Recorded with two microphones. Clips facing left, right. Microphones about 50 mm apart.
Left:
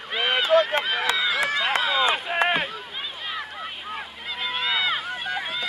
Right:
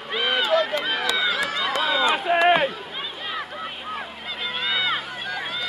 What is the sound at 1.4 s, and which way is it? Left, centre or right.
Run, left.